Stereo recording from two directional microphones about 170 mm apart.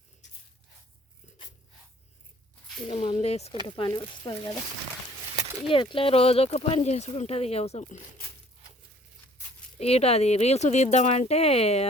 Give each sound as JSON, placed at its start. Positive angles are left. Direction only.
{"t": 2.8, "sound": "speech", "side_deg": 30}
{"t": 3.9, "sound": "speech", "side_deg": 25}
{"t": 5.6, "sound": "speech", "side_deg": 30}
{"t": 9.7, "sound": "speech", "side_deg": 35}